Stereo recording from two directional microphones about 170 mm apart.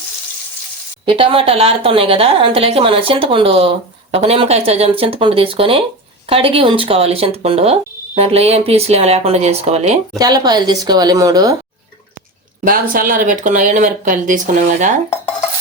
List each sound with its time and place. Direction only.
1.0 s speech: 30° right (ahead or behind)
10.2 s a woman's voice: 25° right (ahead or behind)
12.6 s speech: 55° right (ahead or behind)